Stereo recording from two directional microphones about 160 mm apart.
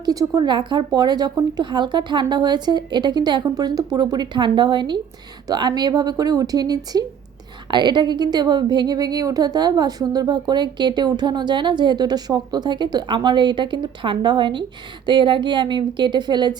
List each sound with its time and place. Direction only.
0.0 s a woman's voice: 20° right (ahead or behind)